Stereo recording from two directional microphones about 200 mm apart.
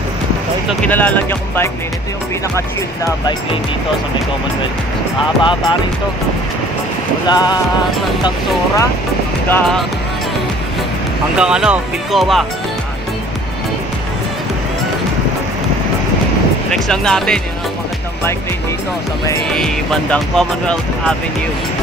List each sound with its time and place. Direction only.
0.8 s speech: 10° left (ahead or behind)
5.4 s speech: 25° left (ahead or behind)
7.2 s speech: 20° left (ahead or behind)
9.5 s speech: centre (ahead or behind)
11.3 s speech: 5° right (ahead or behind)
16.7 s speech: 5° left (ahead or behind)
19.5 s speech: 5° left (ahead or behind)